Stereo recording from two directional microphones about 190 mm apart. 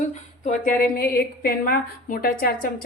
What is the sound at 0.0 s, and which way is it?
A woman's voice, 40° left (ahead or behind).